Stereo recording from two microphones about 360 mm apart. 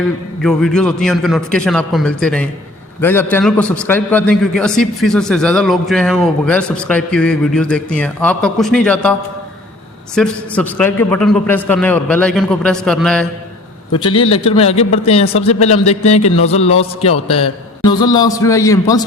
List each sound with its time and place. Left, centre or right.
0.4 s a man's voice: centre
10.2 s a man's voice: centre
14.4 s speech: centre